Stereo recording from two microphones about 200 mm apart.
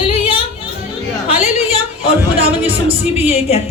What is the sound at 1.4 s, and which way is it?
Music, 30° left (ahead or behind).